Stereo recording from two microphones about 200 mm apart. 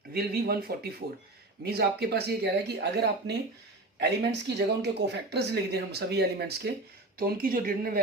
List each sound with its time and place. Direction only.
0.1 s speech: 50° right (ahead or behind)